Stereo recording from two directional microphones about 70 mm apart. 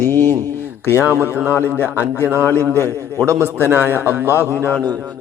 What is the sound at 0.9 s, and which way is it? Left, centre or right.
A man's voice, right.